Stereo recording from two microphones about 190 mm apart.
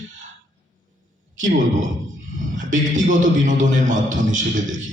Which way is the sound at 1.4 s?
45° right (ahead or behind).